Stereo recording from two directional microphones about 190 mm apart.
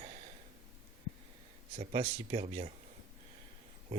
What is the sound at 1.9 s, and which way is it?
Speech, 30° right (ahead or behind).